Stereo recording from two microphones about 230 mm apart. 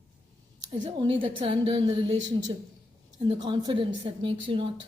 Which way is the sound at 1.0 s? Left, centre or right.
Right.